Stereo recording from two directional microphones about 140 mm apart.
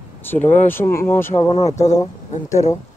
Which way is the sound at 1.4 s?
50° left (ahead or behind).